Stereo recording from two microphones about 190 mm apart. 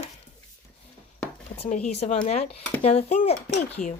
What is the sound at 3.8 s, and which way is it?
Speech, 45° left (ahead or behind).